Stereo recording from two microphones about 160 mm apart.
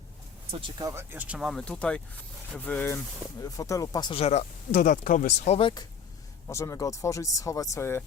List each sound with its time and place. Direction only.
0.8 s speech: 20° right (ahead or behind); by 4.1 s 20° left (ahead or behind)
4.1 s speech: 40° left (ahead or behind)
5.5 s speech: 30° left (ahead or behind)
6.5 s speech: 20° left (ahead or behind)